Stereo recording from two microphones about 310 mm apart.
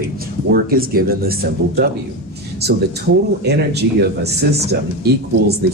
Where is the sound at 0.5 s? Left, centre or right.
Right.